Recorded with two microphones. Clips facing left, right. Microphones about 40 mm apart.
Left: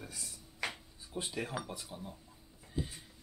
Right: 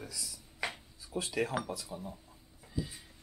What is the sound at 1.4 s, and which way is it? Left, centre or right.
Speech, right.